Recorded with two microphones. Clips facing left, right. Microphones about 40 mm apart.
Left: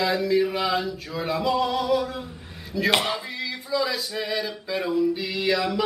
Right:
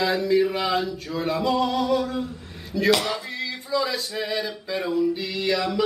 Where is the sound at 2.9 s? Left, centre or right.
Left.